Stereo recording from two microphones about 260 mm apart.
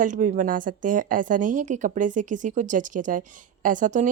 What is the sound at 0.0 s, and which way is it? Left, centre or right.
A woman's voice, right.